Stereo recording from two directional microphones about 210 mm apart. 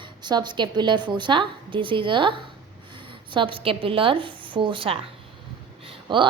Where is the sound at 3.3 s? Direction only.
25° right (ahead or behind).